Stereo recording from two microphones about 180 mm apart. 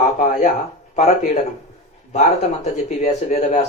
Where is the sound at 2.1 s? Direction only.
40° left (ahead or behind).